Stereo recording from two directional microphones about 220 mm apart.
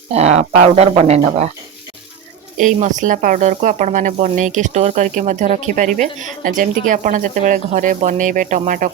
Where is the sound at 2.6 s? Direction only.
35° right (ahead or behind).